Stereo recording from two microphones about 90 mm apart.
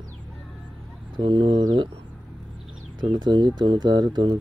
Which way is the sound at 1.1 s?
75° right (ahead or behind).